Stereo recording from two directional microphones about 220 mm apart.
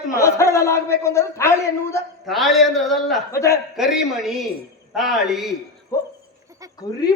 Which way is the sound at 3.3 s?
15° left (ahead or behind).